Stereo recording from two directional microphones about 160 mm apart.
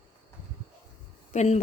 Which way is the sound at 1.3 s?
45° left (ahead or behind).